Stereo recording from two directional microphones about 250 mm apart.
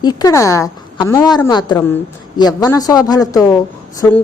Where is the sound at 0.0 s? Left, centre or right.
Centre.